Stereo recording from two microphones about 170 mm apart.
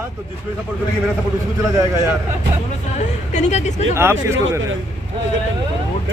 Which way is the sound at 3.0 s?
45° left (ahead or behind).